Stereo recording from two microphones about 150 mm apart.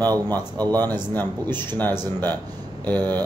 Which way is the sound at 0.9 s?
15° left (ahead or behind).